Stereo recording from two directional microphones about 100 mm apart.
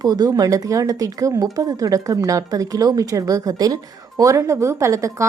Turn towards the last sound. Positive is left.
turn(degrees=-30)  # may be behind; listen again after turning